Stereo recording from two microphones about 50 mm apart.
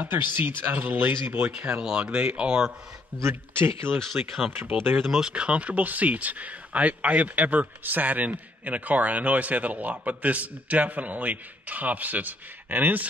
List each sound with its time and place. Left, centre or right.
0.0 s speech: right
1.5 s speech: right
3.2 s speech: right
4.0 s speech: centre
5.2 s speech: right